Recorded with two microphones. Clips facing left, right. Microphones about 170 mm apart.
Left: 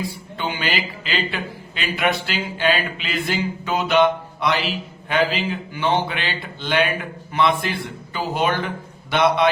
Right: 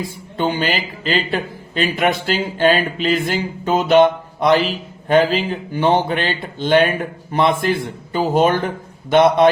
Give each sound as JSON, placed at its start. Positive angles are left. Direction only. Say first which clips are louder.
{"t": 0.3, "sound": "a man's voice", "louder": "right 6 dB", "side_deg": -45}